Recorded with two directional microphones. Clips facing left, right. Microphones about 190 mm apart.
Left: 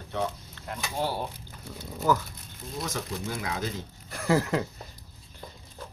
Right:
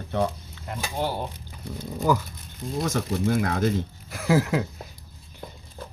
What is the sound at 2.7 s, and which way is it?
Speech, 50° right (ahead or behind).